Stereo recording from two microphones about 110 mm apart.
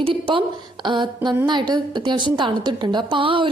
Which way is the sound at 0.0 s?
50° right (ahead or behind).